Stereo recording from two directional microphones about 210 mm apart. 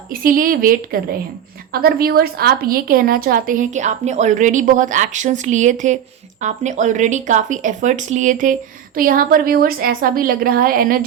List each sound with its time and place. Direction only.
0.1 s a woman's voice: 40° right (ahead or behind)